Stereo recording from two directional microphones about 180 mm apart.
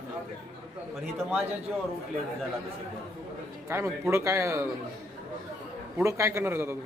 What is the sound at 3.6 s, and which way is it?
A man's voice, 15° right (ahead or behind).